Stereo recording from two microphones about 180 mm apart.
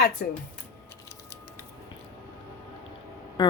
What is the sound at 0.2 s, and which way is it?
Speech, 60° left (ahead or behind).